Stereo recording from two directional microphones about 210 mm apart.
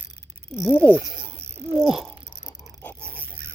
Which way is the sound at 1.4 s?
30° right (ahead or behind).